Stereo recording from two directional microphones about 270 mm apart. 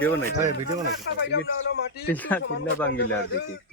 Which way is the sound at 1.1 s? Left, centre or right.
Left.